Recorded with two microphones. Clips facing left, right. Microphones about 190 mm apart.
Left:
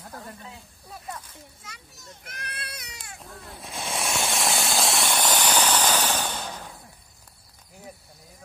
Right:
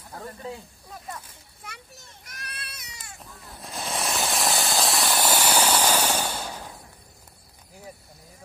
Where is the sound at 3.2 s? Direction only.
Centre (ahead or behind).